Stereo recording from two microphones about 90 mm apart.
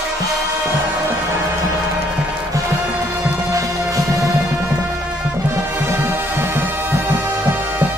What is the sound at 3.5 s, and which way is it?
Music, 40° right (ahead or behind).